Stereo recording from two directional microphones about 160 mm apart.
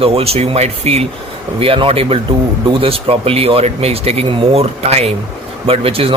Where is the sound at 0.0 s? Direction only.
40° right (ahead or behind).